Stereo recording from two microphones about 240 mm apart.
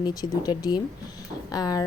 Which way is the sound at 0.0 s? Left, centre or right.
Centre.